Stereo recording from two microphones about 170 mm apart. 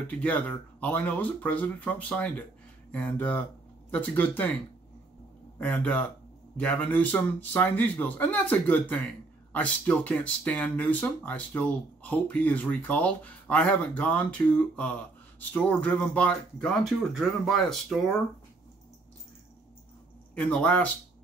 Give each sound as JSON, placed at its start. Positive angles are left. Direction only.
{"t": 0.1, "sound": "speech", "side_deg": 10}
{"t": 5.6, "sound": "speech", "side_deg": 10}
{"t": 20.3, "sound": "speech", "side_deg": 10}